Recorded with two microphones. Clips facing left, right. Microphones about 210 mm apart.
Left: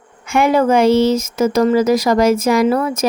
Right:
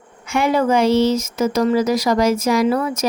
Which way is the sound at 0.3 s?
50° left (ahead or behind).